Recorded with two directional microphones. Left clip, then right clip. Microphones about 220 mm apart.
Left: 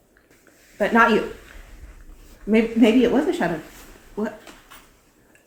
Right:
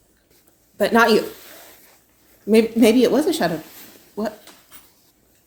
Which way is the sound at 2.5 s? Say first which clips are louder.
Right 3 dB; 50° right (ahead or behind).